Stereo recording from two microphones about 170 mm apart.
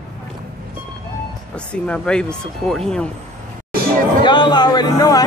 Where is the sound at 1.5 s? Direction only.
5° left (ahead or behind).